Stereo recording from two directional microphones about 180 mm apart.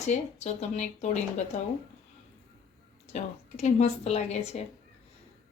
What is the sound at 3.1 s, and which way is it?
A woman's voice, 40° left (ahead or behind).